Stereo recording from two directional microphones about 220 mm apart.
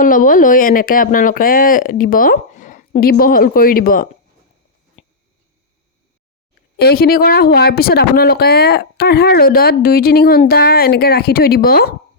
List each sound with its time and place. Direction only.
0.0 s speech: 40° left (ahead or behind)
6.7 s speech: 45° left (ahead or behind)